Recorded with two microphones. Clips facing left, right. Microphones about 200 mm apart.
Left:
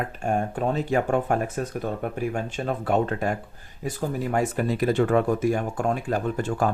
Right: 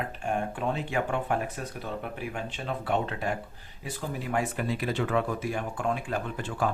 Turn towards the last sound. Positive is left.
turn(degrees=45)  # may be behind; listen again after turning